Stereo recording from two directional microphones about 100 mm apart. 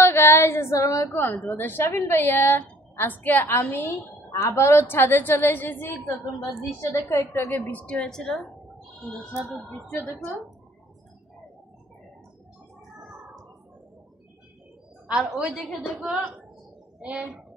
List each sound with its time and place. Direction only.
0.0 s a woman's voice: 25° left (ahead or behind); by 8.5 s 5° left (ahead or behind)
15.0 s a woman's voice: 10° right (ahead or behind)